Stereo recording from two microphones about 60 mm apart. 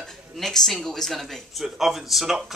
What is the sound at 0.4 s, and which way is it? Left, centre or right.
Speech, centre.